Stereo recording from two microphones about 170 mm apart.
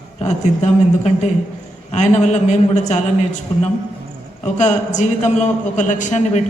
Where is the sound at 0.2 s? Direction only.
40° left (ahead or behind).